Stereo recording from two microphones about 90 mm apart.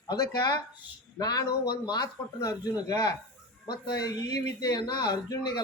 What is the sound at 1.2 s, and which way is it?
A man's voice, 45° left (ahead or behind).